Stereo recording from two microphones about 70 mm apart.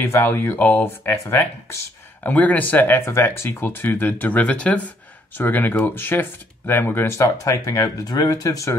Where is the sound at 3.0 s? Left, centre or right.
Left.